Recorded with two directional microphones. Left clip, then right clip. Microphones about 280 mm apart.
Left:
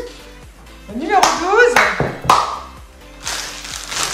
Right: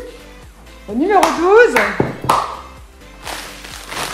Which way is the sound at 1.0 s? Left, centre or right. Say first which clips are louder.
Right 1 dB; centre.